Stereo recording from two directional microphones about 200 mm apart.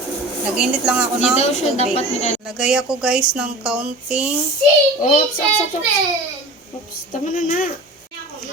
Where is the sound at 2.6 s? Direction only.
5° right (ahead or behind).